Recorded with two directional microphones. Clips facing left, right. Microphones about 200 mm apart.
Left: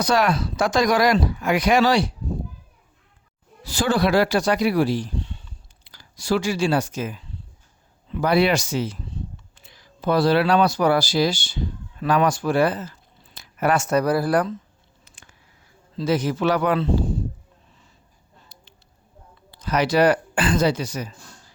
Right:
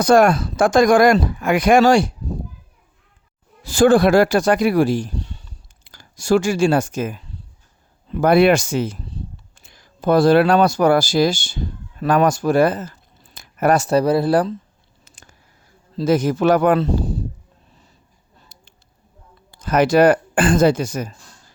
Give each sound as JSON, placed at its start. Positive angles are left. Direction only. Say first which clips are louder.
{"t": 0.0, "sound": "speech", "louder": "right 7 dB", "side_deg": -50}
{"t": 3.6, "sound": "speech", "louder": "right 8 dB", "side_deg": -50}
{"t": 15.1, "sound": "a sound", "louder": "right 4 dB", "side_deg": -40}
{"t": 16.0, "sound": "speech", "louder": "right 5 dB", "side_deg": -45}
{"t": 18.5, "sound": "a sound", "louder": "even", "side_deg": -45}
{"t": 19.5, "sound": "speech", "louder": "right 5 dB", "side_deg": -50}